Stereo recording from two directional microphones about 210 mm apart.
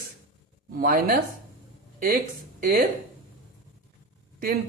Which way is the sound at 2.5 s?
45° right (ahead or behind).